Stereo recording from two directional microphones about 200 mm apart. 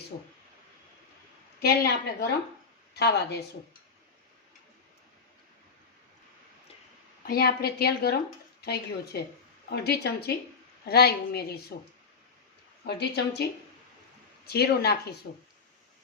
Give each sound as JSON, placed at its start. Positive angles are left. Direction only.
{"t": 1.5, "sound": "a woman's voice", "side_deg": 50}
{"t": 7.3, "sound": "a woman's voice", "side_deg": 50}
{"t": 12.8, "sound": "a woman's voice", "side_deg": 55}